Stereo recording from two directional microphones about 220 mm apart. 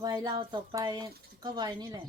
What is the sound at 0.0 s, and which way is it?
Speech, 20° right (ahead or behind).